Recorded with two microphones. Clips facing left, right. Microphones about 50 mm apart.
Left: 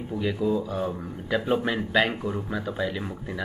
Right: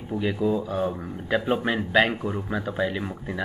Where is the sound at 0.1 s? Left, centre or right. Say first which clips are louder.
Right 1 dB; centre.